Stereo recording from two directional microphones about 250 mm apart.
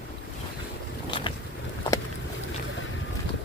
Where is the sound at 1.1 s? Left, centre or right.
Centre.